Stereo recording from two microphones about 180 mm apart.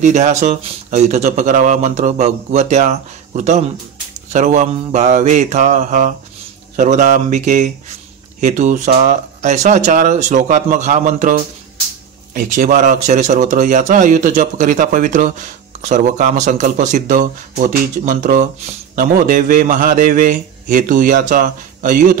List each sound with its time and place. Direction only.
0.0 s speech: 40° right (ahead or behind)